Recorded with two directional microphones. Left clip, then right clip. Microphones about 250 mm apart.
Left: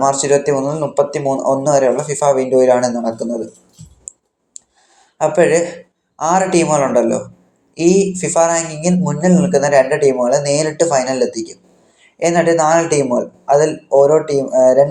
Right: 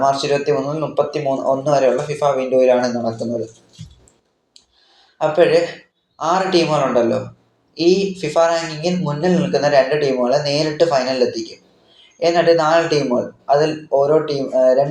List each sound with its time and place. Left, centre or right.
0.0 s speech: left
5.1 s a man's voice: left